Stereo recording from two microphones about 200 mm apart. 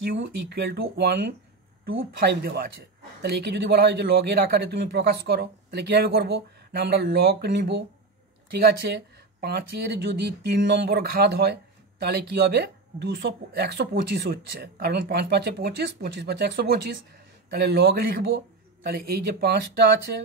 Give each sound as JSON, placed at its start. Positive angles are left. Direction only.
{"t": 0.2, "sound": "speech", "side_deg": -55}
{"t": 2.1, "sound": "speech", "side_deg": -50}
{"t": 19.4, "sound": "speech", "side_deg": -55}